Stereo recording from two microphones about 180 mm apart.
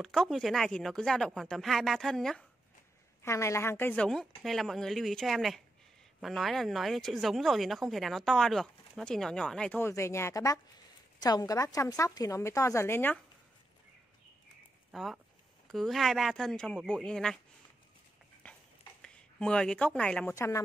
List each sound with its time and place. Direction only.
0.0 s speech: centre (ahead or behind)
3.2 s a woman's voice: 15° left (ahead or behind)
14.9 s speech: centre (ahead or behind)
18.4 s a sound: 5° left (ahead or behind)
20.3 s a woman's voice: 15° left (ahead or behind)